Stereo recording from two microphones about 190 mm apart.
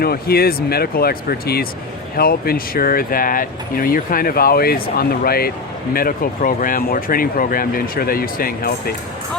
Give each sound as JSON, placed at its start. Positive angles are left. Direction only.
{"t": 0.0, "sound": "speech", "side_deg": 55}